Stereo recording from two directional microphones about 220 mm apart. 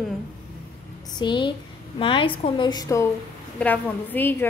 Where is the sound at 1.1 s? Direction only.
20° left (ahead or behind).